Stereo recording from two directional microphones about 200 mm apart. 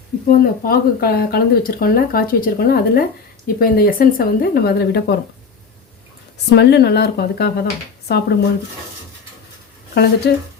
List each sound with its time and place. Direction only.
0.3 s speech: 50° left (ahead or behind)
6.6 s speech: 55° left (ahead or behind)
9.9 s speech: 55° left (ahead or behind)